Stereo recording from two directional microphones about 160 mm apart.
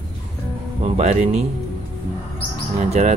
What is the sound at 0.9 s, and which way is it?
Speech, 50° right (ahead or behind).